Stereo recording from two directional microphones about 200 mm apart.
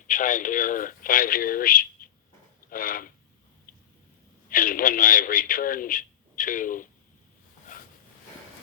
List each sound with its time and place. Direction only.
0.1 s a man's voice: 40° left (ahead or behind)
2.6 s a sound: 45° left (ahead or behind)
4.4 s a man's voice: 45° left (ahead or behind)